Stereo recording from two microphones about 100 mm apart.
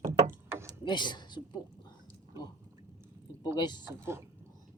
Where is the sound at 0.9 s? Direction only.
50° left (ahead or behind).